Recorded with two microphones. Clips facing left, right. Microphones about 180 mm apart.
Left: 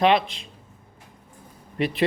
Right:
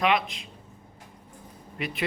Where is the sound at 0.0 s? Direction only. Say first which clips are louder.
Left 5 dB; 30° left (ahead or behind).